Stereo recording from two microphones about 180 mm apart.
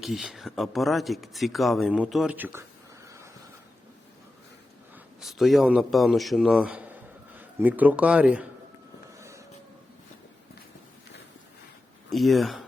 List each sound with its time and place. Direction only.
0.0 s speech: centre (ahead or behind)
5.2 s a man's voice: centre (ahead or behind)
9.1 s vehicle: 15° right (ahead or behind)
12.1 s speech: centre (ahead or behind)